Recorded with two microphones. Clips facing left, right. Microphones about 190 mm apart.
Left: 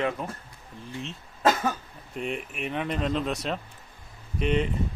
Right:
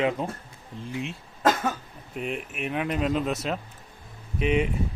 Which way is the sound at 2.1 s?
5° right (ahead or behind).